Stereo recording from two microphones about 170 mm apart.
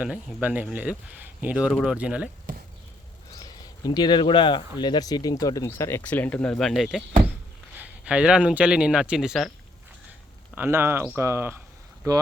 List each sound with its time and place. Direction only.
0.0 s a man's voice: 5° right (ahead or behind)
3.3 s a man's voice: 25° left (ahead or behind); by 9.5 s 5° right (ahead or behind)
10.5 s speech: 10° right (ahead or behind)